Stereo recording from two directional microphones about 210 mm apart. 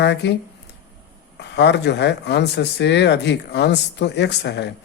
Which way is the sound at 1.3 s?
55° left (ahead or behind).